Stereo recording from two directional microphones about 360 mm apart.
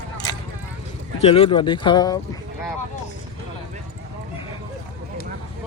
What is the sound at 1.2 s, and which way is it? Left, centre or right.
Speech, centre.